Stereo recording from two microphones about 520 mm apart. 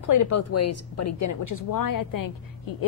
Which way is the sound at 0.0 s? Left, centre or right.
Left.